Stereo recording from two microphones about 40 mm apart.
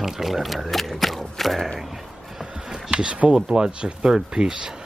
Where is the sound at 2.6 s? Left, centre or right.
Centre.